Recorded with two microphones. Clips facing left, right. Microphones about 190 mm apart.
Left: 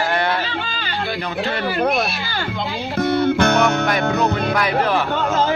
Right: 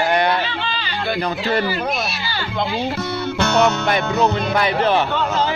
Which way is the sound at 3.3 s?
55° left (ahead or behind).